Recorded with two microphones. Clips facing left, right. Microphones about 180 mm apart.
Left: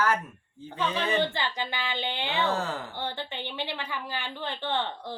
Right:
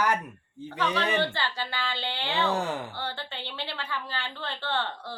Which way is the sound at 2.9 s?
15° left (ahead or behind).